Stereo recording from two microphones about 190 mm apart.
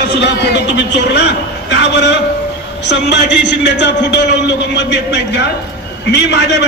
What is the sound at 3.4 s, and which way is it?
A man's voice, 65° left (ahead or behind).